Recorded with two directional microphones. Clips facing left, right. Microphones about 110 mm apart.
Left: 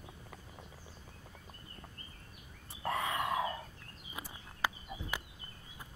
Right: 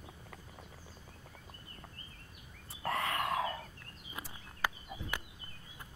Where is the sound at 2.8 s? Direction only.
15° left (ahead or behind).